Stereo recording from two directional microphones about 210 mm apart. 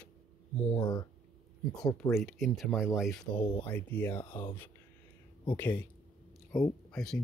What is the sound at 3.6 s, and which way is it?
Speech, 10° left (ahead or behind).